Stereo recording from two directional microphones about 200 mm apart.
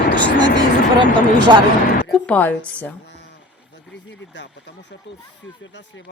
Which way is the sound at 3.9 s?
60° left (ahead or behind).